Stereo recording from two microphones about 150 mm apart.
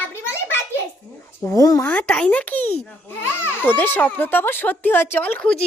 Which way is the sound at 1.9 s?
10° left (ahead or behind).